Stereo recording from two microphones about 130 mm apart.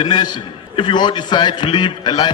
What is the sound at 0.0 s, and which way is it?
A man's voice, 35° left (ahead or behind).